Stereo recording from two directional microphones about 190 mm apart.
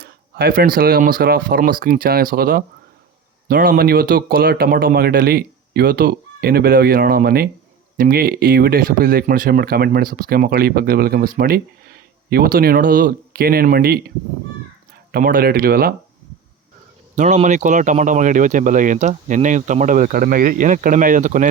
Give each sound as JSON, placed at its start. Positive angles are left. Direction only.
{"t": 0.0, "sound": "speech", "side_deg": -55}
{"t": 15.1, "sound": "speech", "side_deg": -50}
{"t": 17.2, "sound": "speech", "side_deg": -40}